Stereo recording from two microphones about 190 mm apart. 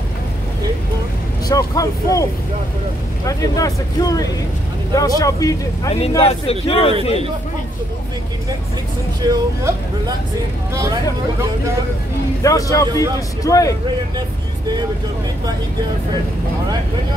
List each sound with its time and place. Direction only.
1.5 s speech: 20° left (ahead or behind)
3.3 s speech: 20° left (ahead or behind)
5.9 s speech: 30° left (ahead or behind)
9.2 s speech: 20° right (ahead or behind)
10.7 s speech: 15° right (ahead or behind)
12.4 s speech: 15° left (ahead or behind)